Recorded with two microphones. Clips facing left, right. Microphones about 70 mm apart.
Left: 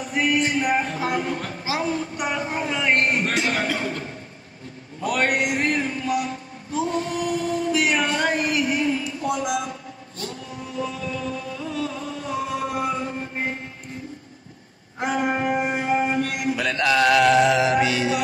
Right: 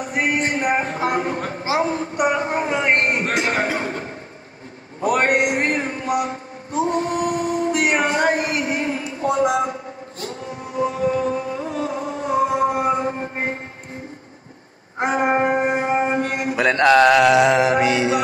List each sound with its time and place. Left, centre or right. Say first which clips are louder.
0.2 s a man's voice: right 1 dB; right
6.0 s mantra: right 3 dB; right
7.4 s a sound: right 3 dB; right
7.7 s a sound: right 2 dB; right
8.1 s a sound: right 4 dB; right
8.4 s speech: even; right
10.8 s music: right 9 dB; right
15.0 s music: right 5 dB; right
16.5 s mantra: right 8 dB; right
17.3 s mantra: right 2 dB; right
17.6 s a man's voice: right 3 dB; right